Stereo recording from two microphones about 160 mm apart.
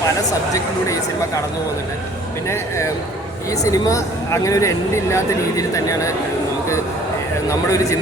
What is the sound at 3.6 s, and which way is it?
Speech, 20° left (ahead or behind).